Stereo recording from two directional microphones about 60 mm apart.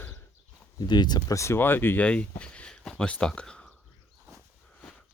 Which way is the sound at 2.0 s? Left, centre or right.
Left.